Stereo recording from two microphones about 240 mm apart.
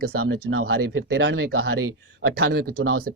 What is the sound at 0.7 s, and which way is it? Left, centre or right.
A man's voice, right.